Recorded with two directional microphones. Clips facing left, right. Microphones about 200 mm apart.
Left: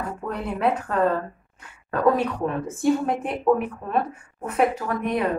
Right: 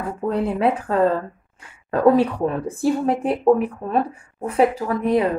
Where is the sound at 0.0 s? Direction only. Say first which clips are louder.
Right 7 dB; 30° right (ahead or behind).